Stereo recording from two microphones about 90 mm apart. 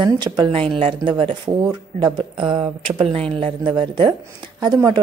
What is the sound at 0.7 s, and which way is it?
Speech, 90° right.